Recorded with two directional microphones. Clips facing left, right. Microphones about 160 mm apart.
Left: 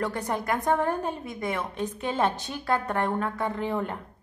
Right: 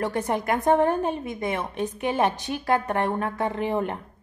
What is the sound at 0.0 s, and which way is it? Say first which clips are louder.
A woman's voice: right 3 dB; 20° right (ahead or behind).